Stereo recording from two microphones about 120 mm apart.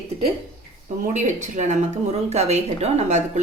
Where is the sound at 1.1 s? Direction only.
90° right.